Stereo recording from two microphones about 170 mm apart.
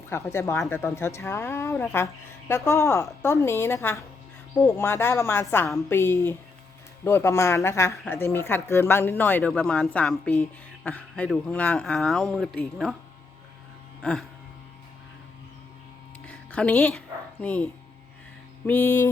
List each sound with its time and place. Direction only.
0.1 s speech: 15° left (ahead or behind); by 13.0 s centre (ahead or behind)
14.0 s speech: 5° left (ahead or behind)
16.2 s a sound: 5° left (ahead or behind)
17.4 s speech: 10° left (ahead or behind)